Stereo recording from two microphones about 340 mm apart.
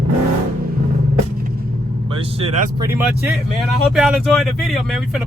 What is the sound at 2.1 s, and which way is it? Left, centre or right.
Speech, centre.